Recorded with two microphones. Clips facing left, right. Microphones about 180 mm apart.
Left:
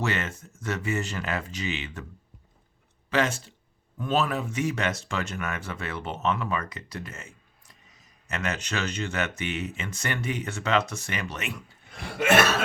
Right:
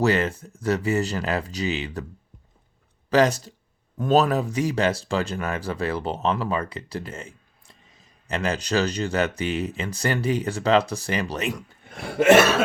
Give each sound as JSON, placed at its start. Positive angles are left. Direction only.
{"t": 0.0, "sound": "speech", "side_deg": -35}
{"t": 3.1, "sound": "speech", "side_deg": -40}